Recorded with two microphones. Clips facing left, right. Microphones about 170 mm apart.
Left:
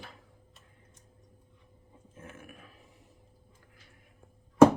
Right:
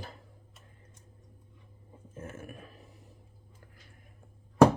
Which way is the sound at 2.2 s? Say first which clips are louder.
Right 5 dB; 40° right (ahead or behind).